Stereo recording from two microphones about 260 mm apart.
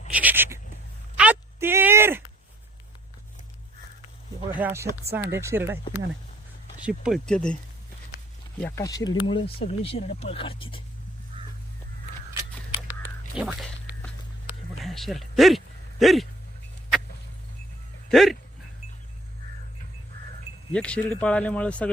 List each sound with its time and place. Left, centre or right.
0.1 s speech: centre
1.1 s a sound: centre
4.5 s speech: centre
13.3 s speech: centre
14.8 s a sound: centre
18.1 s speech: centre
20.7 s speech: centre